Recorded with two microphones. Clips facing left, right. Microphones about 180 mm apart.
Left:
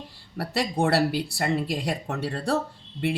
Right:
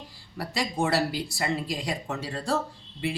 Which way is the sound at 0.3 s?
65° left (ahead or behind).